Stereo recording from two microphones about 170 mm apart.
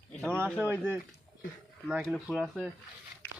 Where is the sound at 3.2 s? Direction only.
10° left (ahead or behind).